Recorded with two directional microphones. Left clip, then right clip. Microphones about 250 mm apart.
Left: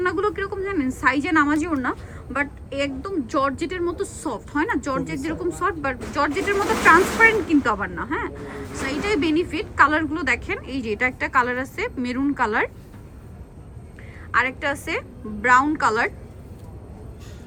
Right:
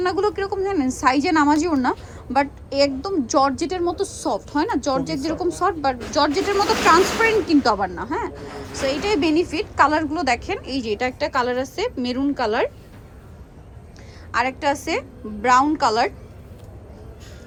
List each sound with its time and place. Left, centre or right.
0.0 s a woman's voice: centre
14.3 s a woman's voice: centre